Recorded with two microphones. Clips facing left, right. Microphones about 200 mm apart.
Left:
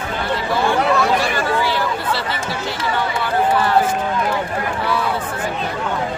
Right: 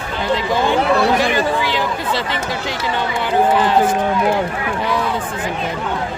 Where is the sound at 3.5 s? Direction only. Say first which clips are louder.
Right 2 dB; 15° right (ahead or behind).